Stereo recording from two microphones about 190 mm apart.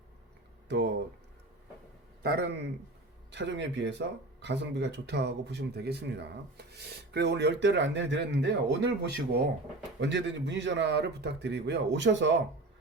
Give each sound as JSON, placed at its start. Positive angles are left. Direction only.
{"t": 0.7, "sound": "speech", "side_deg": -65}
{"t": 2.2, "sound": "speech", "side_deg": -55}